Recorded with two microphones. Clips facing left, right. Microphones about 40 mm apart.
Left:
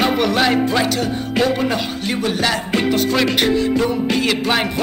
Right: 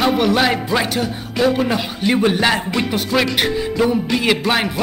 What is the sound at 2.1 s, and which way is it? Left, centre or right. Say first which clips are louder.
Music: right 4 dB; centre.